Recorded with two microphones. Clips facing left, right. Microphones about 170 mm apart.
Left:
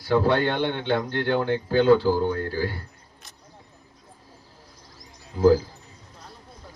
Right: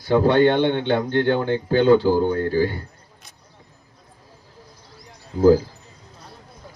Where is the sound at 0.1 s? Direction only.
20° right (ahead or behind).